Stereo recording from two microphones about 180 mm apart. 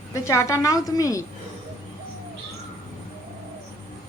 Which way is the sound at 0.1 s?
15° left (ahead or behind).